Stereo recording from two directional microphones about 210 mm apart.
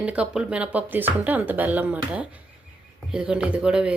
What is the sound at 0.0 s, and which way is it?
Speech, 5° right (ahead or behind).